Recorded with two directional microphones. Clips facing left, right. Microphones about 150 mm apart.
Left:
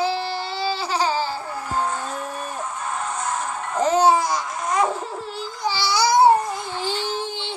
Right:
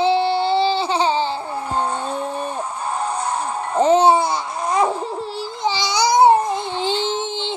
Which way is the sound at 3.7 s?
30° right (ahead or behind).